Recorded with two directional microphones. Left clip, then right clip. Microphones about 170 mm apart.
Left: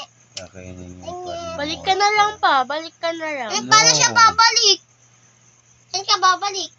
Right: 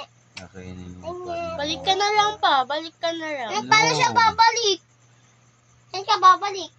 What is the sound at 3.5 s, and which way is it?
A child's voice, 35° right (ahead or behind).